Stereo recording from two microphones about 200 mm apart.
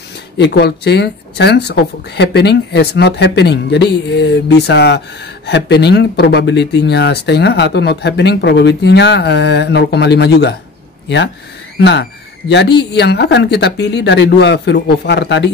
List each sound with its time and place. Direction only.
0.4 s speech: 55° left (ahead or behind)
11.8 s speech: 60° left (ahead or behind)